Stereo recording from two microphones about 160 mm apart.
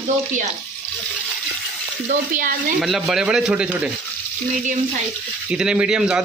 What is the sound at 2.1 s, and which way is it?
Speech, 60° right (ahead or behind).